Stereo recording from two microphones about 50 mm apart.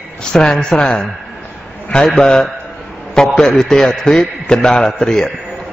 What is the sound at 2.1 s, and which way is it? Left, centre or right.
A man's voice, centre.